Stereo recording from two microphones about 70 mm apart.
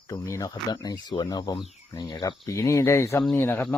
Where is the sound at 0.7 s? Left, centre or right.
Left.